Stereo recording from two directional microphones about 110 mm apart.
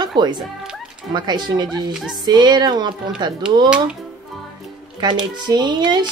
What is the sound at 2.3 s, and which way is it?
Speech, 40° right (ahead or behind).